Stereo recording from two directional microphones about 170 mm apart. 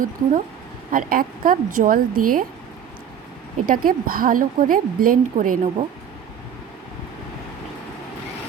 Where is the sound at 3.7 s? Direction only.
55° right (ahead or behind).